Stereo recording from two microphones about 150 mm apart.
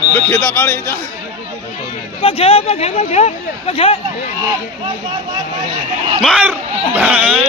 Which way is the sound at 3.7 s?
35° left (ahead or behind).